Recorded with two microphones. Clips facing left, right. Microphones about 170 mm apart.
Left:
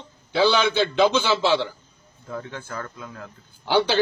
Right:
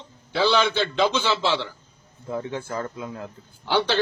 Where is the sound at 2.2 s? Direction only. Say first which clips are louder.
Right 4 dB; 25° right (ahead or behind).